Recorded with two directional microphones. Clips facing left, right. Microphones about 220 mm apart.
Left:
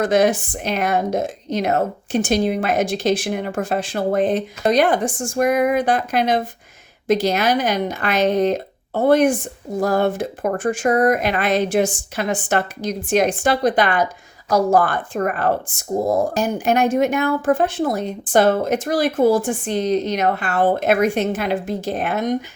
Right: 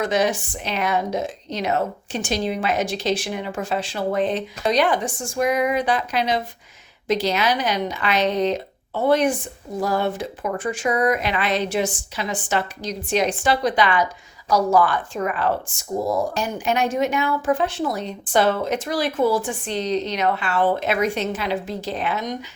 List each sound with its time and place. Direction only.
0.0 s a woman's voice: 50° left (ahead or behind)